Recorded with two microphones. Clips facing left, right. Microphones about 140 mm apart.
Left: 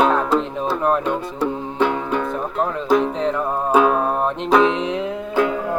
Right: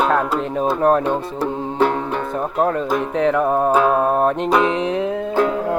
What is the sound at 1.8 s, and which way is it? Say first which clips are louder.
Music: right 1 dB; 40° right (ahead or behind).